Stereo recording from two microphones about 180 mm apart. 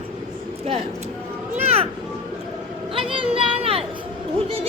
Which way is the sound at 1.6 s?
35° right (ahead or behind).